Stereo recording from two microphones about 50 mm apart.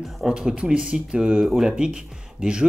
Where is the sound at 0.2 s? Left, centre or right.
Centre.